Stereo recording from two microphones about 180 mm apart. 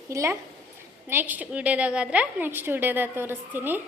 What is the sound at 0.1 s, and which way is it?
A woman's voice, 15° right (ahead or behind).